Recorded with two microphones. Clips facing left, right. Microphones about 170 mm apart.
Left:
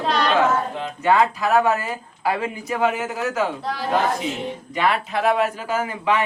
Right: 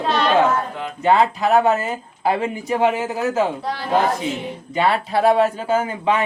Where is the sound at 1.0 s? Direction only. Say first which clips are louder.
Right 2 dB; 30° right (ahead or behind).